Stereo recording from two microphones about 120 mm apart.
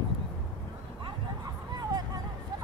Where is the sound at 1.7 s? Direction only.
35° right (ahead or behind).